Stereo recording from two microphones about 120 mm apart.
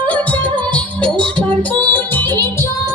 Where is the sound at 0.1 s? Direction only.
10° left (ahead or behind).